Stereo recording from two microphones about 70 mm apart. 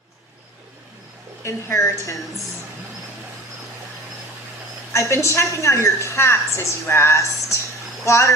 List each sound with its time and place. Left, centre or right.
1.5 s speech: left
4.9 s a woman's voice: left